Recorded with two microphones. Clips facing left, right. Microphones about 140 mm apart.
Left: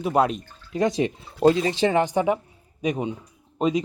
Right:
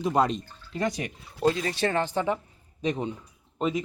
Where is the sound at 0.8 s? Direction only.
20° left (ahead or behind).